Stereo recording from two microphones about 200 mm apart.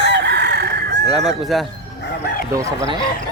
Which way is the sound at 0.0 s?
60° right (ahead or behind).